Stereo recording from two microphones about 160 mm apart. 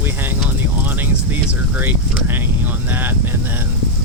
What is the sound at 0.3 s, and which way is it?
Speech, 10° right (ahead or behind).